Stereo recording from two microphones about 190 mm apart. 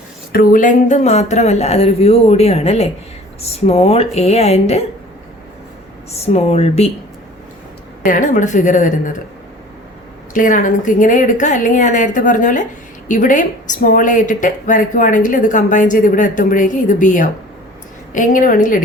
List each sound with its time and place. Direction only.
0.3 s speech: 45° left (ahead or behind)
6.2 s speech: 35° left (ahead or behind)
8.0 s speech: 45° left (ahead or behind)
10.3 s speech: 45° left (ahead or behind)